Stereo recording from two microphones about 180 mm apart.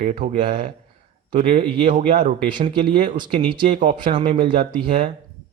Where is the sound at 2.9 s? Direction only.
45° right (ahead or behind).